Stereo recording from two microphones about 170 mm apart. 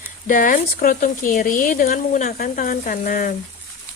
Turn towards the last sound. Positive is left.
turn(degrees=55)  # may be behind; listen again after turning